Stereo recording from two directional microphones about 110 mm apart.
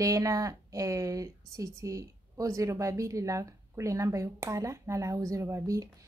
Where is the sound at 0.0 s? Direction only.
30° right (ahead or behind).